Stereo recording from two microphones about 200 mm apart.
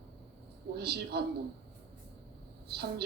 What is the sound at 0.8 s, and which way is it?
Speech, 55° right (ahead or behind).